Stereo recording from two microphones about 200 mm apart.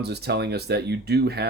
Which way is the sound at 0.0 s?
55° right (ahead or behind).